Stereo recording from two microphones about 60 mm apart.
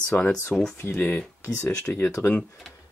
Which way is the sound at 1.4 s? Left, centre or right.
Left.